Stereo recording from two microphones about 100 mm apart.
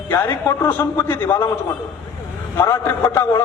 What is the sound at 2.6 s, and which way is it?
Speech, 25° left (ahead or behind).